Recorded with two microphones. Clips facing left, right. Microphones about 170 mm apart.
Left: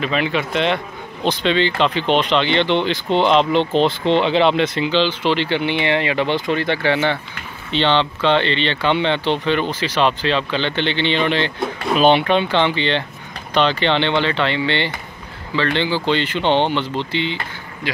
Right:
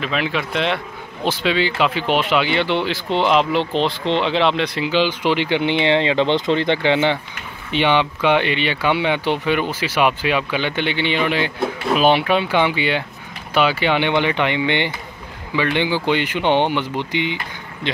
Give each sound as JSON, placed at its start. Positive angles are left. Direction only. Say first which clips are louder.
{"t": 0.0, "sound": "speech", "louder": "left 2 dB", "side_deg": 0}